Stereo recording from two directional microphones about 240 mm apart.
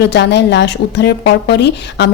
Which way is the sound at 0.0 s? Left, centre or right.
Left.